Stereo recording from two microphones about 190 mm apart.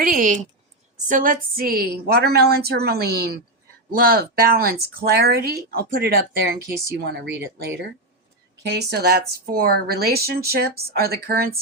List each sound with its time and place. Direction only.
0.0 s a woman's voice: 45° right (ahead or behind)